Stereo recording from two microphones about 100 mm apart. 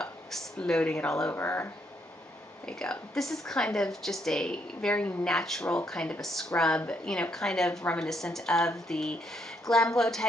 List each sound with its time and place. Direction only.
0.0 s speech: 5° left (ahead or behind)
1.3 s speech: 25° left (ahead or behind)
2.6 s a woman's voice: 5° left (ahead or behind)